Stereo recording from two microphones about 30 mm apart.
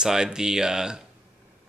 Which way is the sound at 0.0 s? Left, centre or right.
Right.